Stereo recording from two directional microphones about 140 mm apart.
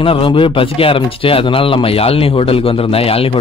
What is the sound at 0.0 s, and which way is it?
Speech, 40° left (ahead or behind).